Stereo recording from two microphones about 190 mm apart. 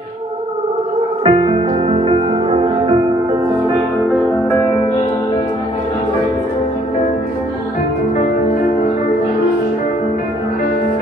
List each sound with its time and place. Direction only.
1.2 s music: 30° right (ahead or behind)